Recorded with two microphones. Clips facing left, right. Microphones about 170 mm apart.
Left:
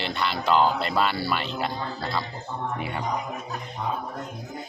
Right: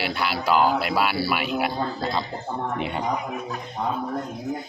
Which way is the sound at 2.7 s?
20° right (ahead or behind).